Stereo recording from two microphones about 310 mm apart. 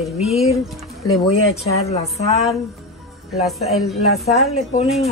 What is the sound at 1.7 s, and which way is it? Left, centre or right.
Speech, centre.